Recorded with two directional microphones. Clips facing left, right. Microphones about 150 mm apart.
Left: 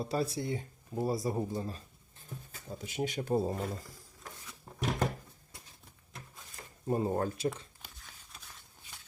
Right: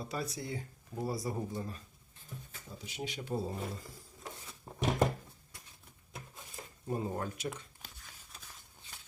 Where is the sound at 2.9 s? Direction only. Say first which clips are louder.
Left 7 dB; 50° left (ahead or behind).